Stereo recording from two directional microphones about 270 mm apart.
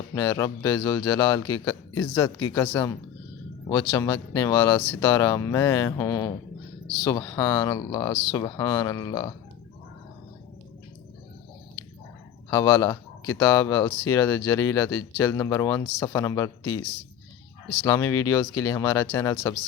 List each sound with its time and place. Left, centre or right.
0.1 s speech: centre
3.9 s speech: centre
12.5 s speech: centre
16.6 s speech: left
17.8 s speech: centre